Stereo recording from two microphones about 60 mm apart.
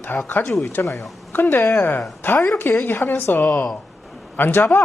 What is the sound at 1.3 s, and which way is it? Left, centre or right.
A woman's voice, left.